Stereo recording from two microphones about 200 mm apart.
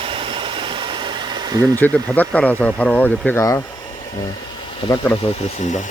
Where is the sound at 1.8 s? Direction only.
10° left (ahead or behind).